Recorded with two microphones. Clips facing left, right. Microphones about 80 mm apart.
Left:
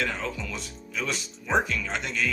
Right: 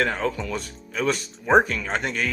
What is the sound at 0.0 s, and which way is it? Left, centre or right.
Speech, right.